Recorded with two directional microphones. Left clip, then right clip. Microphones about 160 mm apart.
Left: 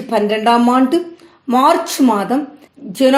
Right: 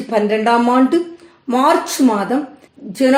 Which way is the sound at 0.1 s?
40° left (ahead or behind).